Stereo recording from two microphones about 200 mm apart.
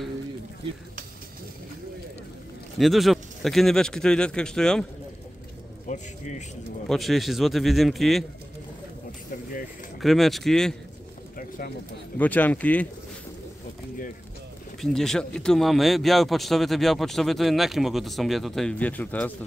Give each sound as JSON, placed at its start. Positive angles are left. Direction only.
{"t": 2.8, "sound": "speech", "side_deg": 0}
{"t": 5.9, "sound": "speech", "side_deg": 35}
{"t": 6.9, "sound": "speech", "side_deg": 0}
{"t": 10.0, "sound": "speech", "side_deg": 0}
{"t": 11.3, "sound": "bird", "side_deg": 45}
{"t": 12.2, "sound": "speech", "side_deg": 10}
{"t": 14.8, "sound": "speech", "side_deg": 0}